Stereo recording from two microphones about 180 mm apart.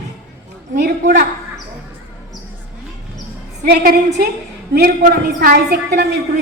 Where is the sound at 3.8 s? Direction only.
55° right (ahead or behind).